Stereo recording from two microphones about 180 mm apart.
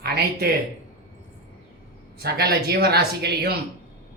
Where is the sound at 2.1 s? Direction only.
60° right (ahead or behind).